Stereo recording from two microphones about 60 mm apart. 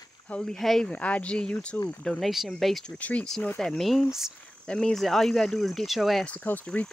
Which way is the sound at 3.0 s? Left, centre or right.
Left.